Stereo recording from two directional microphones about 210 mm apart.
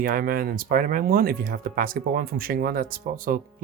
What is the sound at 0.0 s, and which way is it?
Speech, 40° right (ahead or behind).